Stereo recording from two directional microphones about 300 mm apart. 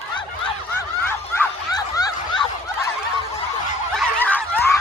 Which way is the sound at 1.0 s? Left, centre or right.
Centre.